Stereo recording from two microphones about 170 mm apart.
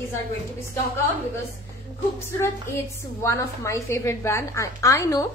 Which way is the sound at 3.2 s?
15° left (ahead or behind).